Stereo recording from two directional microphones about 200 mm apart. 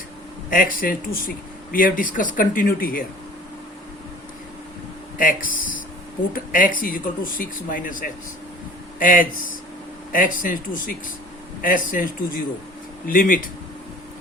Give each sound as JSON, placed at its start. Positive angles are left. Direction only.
{"t": 0.5, "sound": "speech", "side_deg": 45}
{"t": 5.1, "sound": "speech", "side_deg": 45}